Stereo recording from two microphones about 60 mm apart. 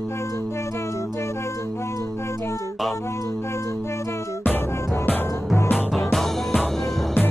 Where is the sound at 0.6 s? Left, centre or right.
Left.